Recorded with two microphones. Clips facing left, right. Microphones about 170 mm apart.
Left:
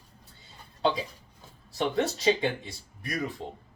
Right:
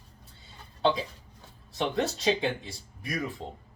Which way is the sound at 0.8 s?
Centre (ahead or behind).